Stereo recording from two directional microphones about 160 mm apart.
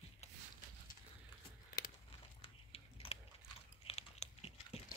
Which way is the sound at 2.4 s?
35° left (ahead or behind).